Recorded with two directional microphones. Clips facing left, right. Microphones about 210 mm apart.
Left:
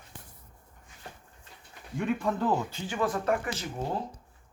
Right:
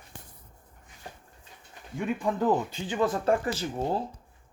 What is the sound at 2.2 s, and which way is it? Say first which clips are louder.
Speech: right 2 dB; 15° right (ahead or behind).